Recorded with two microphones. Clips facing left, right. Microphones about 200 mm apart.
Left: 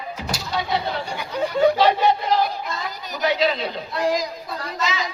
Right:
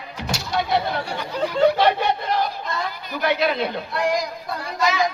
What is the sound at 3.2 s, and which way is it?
Speech, 55° right (ahead or behind).